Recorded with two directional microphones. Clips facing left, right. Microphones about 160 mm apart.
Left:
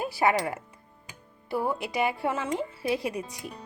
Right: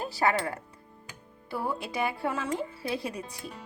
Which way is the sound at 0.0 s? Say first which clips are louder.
Left 2 dB; 15° left (ahead or behind).